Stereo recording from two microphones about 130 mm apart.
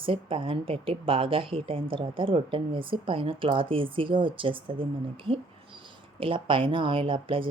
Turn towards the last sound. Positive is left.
turn(degrees=-40)  # may be behind; listen again after turning